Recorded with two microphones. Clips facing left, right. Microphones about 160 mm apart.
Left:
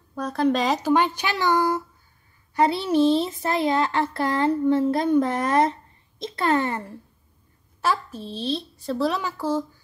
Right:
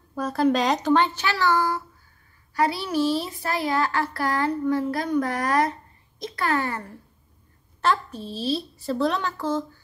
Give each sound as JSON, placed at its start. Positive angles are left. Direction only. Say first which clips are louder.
{"t": 0.1, "sound": "a child's voice", "louder": "right 1 dB", "side_deg": -5}
{"t": 7.8, "sound": "a woman's voice", "louder": "right 1 dB", "side_deg": 5}